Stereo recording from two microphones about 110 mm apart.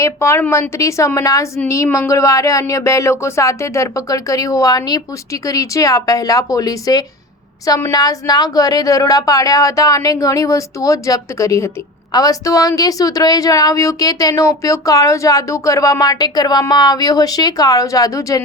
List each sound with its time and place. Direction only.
0.0 s a woman's voice: 25° left (ahead or behind)